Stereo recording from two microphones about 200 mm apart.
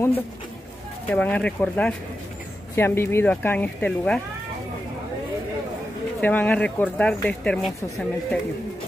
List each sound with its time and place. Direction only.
1.0 s speech: 10° left (ahead or behind)
6.2 s speech: 10° left (ahead or behind)